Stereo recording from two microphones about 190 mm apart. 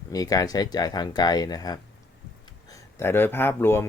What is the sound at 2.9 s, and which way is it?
Speech, 10° left (ahead or behind).